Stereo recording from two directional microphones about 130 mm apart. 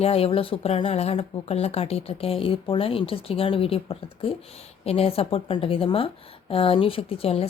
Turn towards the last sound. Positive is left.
turn(degrees=50)  # may be behind; listen again after turning